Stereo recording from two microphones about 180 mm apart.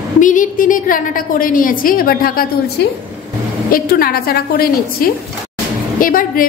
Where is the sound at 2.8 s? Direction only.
65° left (ahead or behind).